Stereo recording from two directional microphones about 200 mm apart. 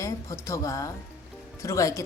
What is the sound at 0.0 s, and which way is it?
Speech, 15° left (ahead or behind).